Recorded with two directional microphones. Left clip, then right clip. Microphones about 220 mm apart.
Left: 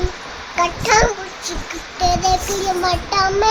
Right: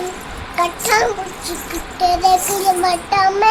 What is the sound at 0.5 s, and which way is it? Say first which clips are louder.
A child's voice: left 1 dB; 15° left (ahead or behind).